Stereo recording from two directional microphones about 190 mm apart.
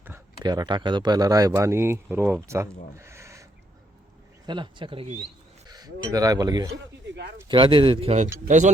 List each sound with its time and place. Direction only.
0.4 s speech: 20° right (ahead or behind)
3.0 s owl: 15° right (ahead or behind)
4.4 s speech: 25° right (ahead or behind); by 8.7 s 40° right (ahead or behind)